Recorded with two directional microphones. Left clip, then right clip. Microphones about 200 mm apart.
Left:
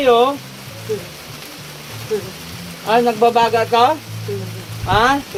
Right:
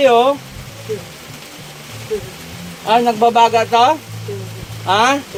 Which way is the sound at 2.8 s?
55° right (ahead or behind).